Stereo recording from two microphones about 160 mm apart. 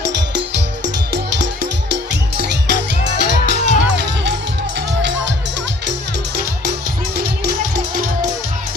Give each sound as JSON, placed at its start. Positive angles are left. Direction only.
{"t": 1.1, "sound": "music", "side_deg": -90}